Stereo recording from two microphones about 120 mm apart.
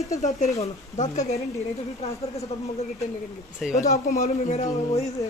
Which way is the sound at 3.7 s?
75° left (ahead or behind).